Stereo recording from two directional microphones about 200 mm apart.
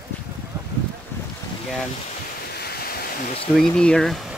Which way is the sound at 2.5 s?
50° left (ahead or behind).